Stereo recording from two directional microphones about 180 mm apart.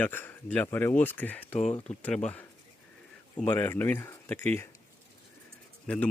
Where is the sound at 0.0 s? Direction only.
10° left (ahead or behind).